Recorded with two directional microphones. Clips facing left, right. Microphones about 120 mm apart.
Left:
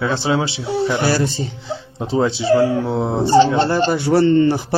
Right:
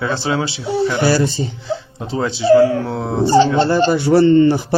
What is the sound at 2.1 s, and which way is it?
Speech, 25° left (ahead or behind).